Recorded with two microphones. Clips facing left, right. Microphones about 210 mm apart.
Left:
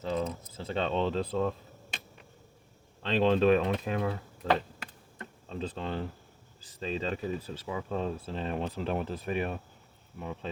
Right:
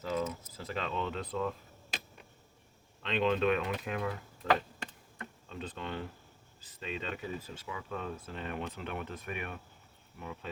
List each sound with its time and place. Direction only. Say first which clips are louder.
0.0 s speech: left 2 dB; 30° left (ahead or behind)
3.0 s speech: left 5 dB; 35° left (ahead or behind)
5.1 s a sound: left 9 dB; 35° left (ahead or behind)
6.6 s speech: left 6 dB; 35° left (ahead or behind)